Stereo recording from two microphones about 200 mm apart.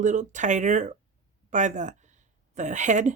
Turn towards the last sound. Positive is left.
turn(degrees=-35)  # may be behind; listen again after turning